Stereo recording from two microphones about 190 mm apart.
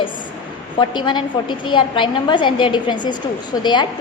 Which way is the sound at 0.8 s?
25° left (ahead or behind).